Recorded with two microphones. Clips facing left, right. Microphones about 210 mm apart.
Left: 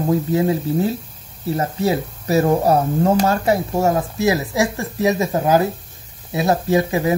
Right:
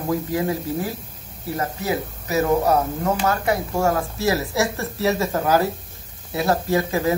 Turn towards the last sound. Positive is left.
turn(degrees=20)  # may be behind; listen again after turning